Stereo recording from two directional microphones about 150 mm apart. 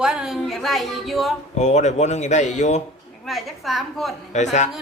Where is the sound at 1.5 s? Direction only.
50° left (ahead or behind).